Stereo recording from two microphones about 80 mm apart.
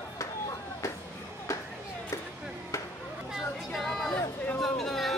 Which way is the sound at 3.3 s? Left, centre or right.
Centre.